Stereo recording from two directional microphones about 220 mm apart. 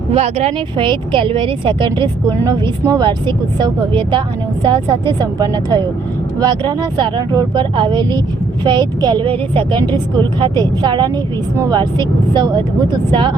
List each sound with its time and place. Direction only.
0.1 s speech: 30° right (ahead or behind)